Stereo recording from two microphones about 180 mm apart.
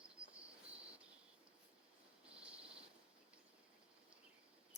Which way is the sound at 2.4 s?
5° right (ahead or behind).